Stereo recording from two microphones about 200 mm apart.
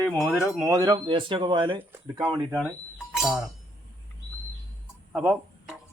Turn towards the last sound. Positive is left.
turn(degrees=-5)  # may be behind; listen again after turning